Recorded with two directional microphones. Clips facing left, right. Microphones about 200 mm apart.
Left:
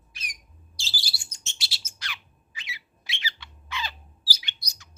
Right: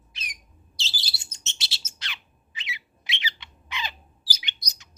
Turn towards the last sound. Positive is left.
turn(degrees=-20)  # may be behind; listen again after turning